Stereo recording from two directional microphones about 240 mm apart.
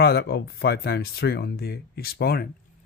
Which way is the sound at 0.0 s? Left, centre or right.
Left.